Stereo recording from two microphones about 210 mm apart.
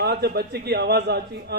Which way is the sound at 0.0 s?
50° right (ahead or behind).